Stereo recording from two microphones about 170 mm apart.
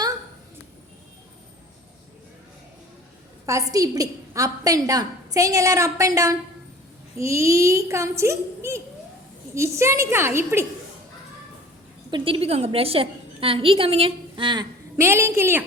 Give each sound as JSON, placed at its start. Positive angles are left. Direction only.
{"t": 3.4, "sound": "a woman's voice", "side_deg": -20}
{"t": 12.1, "sound": "a woman's voice", "side_deg": -30}